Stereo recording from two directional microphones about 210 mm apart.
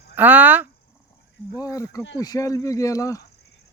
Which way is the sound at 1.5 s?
15° left (ahead or behind).